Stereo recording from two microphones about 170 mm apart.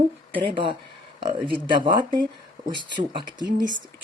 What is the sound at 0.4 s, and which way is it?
Speech, 30° right (ahead or behind).